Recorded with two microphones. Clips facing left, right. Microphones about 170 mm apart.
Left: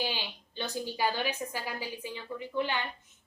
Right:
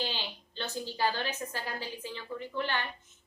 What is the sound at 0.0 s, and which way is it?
A woman's voice, 10° left (ahead or behind).